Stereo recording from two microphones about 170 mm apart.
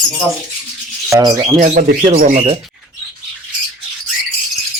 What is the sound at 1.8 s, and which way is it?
Speech, 50° right (ahead or behind).